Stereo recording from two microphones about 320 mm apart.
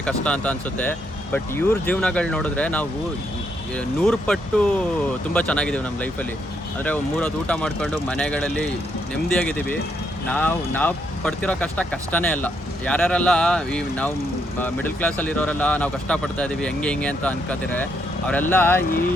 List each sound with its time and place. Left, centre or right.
0.0 s speech: centre
18.9 s speech: left